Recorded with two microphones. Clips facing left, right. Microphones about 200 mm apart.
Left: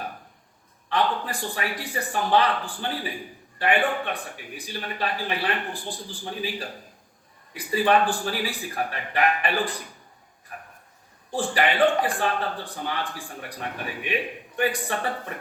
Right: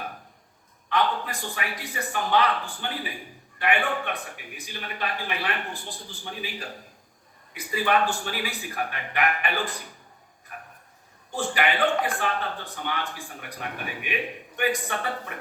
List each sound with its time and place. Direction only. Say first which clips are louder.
0.9 s a man's voice: left 1 dB; 35° left (ahead or behind)
10.5 s a sound: left 1 dB; 35° left (ahead or behind)
11.3 s a man's voice: left 2 dB; 35° left (ahead or behind)